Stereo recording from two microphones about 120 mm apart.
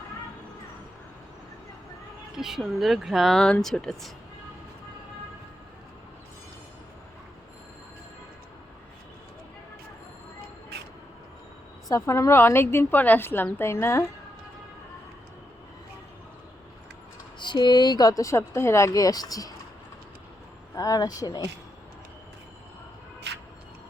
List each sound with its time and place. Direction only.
2.3 s speech: 5° right (ahead or behind)
11.9 s a woman's voice: 25° left (ahead or behind)
17.4 s speech: 40° left (ahead or behind)
20.7 s speech: 30° left (ahead or behind)